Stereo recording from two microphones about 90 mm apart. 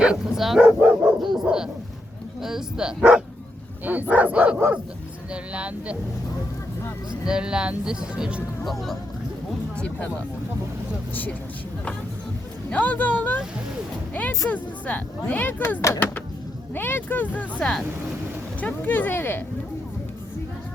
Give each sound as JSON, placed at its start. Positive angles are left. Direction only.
{"t": 0.0, "sound": "speech", "side_deg": -5}
{"t": 0.6, "sound": "speech", "side_deg": -15}
{"t": 1.2, "sound": "dog", "side_deg": -5}
{"t": 2.4, "sound": "speech", "side_deg": -5}
{"t": 7.3, "sound": "speech", "side_deg": -10}
{"t": 8.6, "sound": "speech", "side_deg": 0}
{"t": 9.7, "sound": "speech", "side_deg": 15}
{"t": 12.7, "sound": "speech", "side_deg": 20}